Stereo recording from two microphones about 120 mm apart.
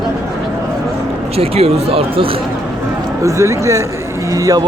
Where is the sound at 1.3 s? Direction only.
55° right (ahead or behind).